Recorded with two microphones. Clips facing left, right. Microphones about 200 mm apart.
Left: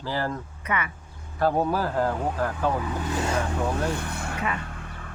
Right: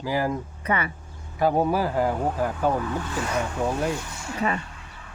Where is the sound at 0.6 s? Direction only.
35° right (ahead or behind).